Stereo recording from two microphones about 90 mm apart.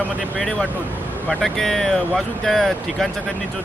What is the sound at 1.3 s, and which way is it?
Speech, 5° left (ahead or behind).